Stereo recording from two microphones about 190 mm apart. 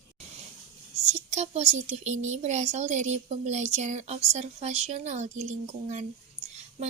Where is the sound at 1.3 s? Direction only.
35° right (ahead or behind).